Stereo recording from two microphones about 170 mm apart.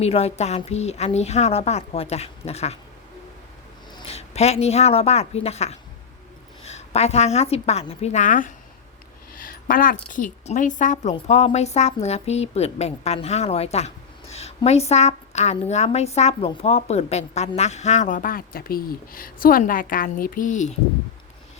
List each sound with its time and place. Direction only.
0.0 s a woman's voice: 35° left (ahead or behind)
3.9 s a woman's voice: 35° left (ahead or behind)